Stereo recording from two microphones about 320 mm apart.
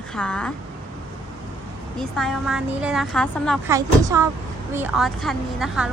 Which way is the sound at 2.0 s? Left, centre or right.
Centre.